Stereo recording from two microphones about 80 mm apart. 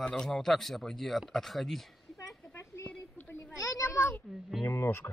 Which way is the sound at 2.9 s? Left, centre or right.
Centre.